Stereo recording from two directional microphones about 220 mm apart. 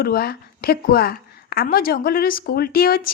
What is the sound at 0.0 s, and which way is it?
A woman's voice, 45° left (ahead or behind).